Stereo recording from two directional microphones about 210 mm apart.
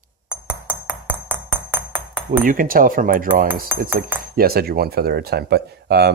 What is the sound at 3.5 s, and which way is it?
Speech, 45° right (ahead or behind).